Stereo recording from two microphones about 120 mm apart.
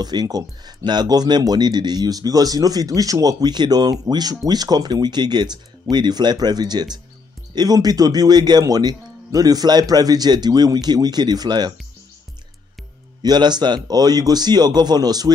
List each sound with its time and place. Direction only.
0.0 s speech: 35° right (ahead or behind)
13.2 s speech: 35° right (ahead or behind)